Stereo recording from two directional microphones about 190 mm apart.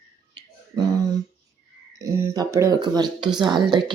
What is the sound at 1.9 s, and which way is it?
A woman's voice, 15° right (ahead or behind).